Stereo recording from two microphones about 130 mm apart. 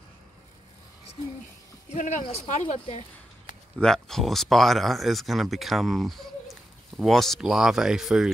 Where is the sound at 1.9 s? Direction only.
70° left (ahead or behind).